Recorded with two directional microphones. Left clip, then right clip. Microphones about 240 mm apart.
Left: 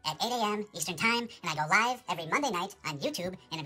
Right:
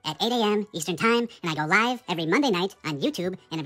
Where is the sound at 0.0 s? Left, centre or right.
Centre.